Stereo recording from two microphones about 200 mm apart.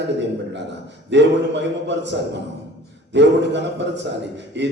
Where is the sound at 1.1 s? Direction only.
60° right (ahead or behind).